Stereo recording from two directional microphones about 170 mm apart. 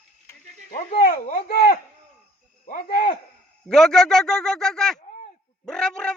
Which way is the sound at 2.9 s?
55° left (ahead or behind).